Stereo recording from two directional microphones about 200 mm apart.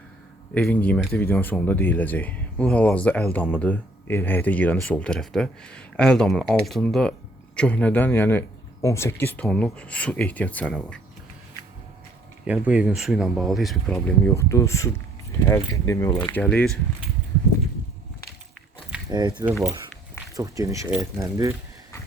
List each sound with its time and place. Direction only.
0.5 s speech: 5° left (ahead or behind)
12.5 s speech: 5° right (ahead or behind)
14.3 s speech: 15° left (ahead or behind)
16.3 s speech: 5° left (ahead or behind)
19.1 s speech: 20° right (ahead or behind)
19.5 s speech: 10° right (ahead or behind)